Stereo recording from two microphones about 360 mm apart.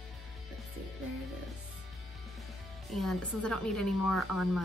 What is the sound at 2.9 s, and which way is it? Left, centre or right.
Speech, centre.